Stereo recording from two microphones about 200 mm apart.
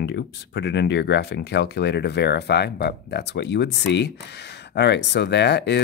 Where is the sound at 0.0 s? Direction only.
60° left (ahead or behind).